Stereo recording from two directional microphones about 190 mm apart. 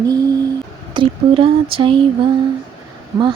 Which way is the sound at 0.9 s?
25° right (ahead or behind).